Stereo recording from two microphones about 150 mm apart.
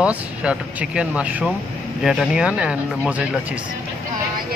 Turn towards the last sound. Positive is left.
turn(degrees=-10)  # may be behind; listen again after turning